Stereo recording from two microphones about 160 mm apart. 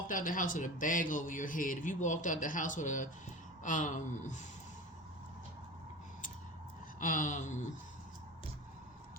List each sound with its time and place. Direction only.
0.1 s a man's voice: 55° left (ahead or behind)
7.0 s speech: 55° left (ahead or behind)